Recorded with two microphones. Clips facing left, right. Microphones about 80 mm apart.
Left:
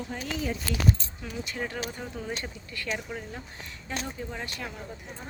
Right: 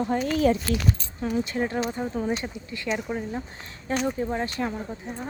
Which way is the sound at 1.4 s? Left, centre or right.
Right.